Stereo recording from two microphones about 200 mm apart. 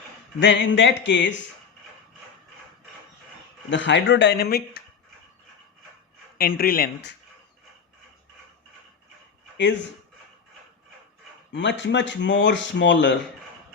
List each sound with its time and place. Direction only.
0.3 s speech: 65° left (ahead or behind)
3.7 s speech: 65° left (ahead or behind)
6.3 s speech: 50° left (ahead or behind)
11.5 s speech: 60° left (ahead or behind)